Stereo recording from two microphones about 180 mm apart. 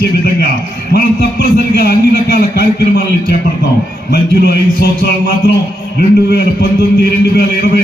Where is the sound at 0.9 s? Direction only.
60° left (ahead or behind).